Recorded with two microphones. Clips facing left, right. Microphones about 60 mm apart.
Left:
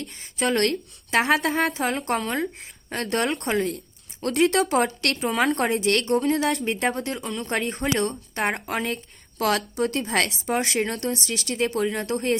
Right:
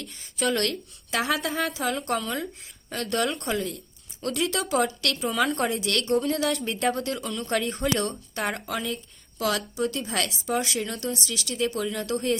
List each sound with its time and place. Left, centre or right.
0.0 s a woman's voice: left
8.7 s a woman's voice: left